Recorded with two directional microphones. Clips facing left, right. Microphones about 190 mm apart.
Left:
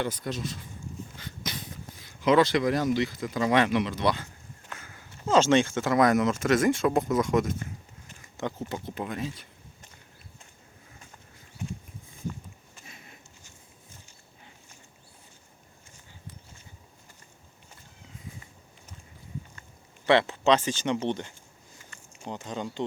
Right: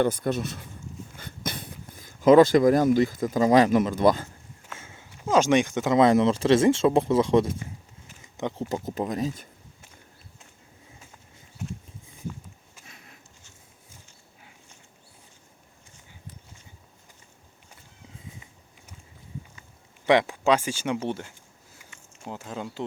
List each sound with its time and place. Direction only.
0.0 s speech: 55° right (ahead or behind)
1.5 s a sound: 50° right (ahead or behind)
2.0 s speech: 45° right (ahead or behind)
4.8 s walk: 25° right (ahead or behind)
5.1 s speech: 10° right (ahead or behind); by 7.5 s 30° right (ahead or behind)
8.4 s speech: 20° right (ahead or behind)
8.7 s speech: 40° right (ahead or behind)
12.8 s a sound: centre (ahead or behind)
20.1 s speech: 15° right (ahead or behind)